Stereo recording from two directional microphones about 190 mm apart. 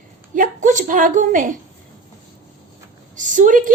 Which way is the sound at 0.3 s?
40° right (ahead or behind).